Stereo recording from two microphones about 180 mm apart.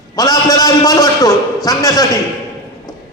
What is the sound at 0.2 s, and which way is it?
A man's voice, 20° left (ahead or behind).